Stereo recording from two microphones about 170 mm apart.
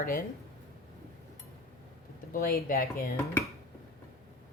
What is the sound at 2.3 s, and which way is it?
Speech, 60° left (ahead or behind).